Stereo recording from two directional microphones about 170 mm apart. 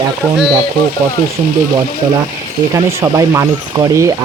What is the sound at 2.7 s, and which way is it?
Speech, 15° right (ahead or behind).